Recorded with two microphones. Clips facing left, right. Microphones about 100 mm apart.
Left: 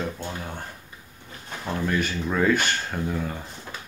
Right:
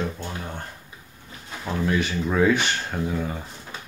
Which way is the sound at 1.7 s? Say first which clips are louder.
Right 2 dB; centre (ahead or behind).